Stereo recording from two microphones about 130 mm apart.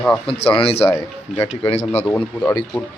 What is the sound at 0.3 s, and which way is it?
Speech, 45° left (ahead or behind).